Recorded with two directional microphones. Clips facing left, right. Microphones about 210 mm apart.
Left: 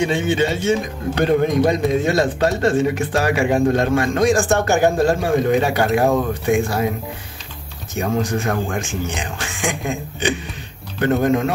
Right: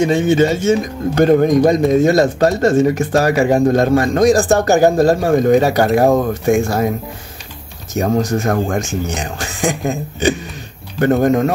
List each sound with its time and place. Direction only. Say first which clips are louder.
0.0 s a man's voice: right 6 dB; 40° right (ahead or behind)
7.9 s a man's voice: right 5 dB; 40° right (ahead or behind)